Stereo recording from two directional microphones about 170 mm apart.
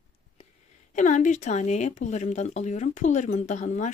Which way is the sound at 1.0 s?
45° left (ahead or behind).